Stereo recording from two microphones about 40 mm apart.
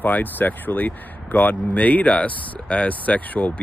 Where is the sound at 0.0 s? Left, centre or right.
Left.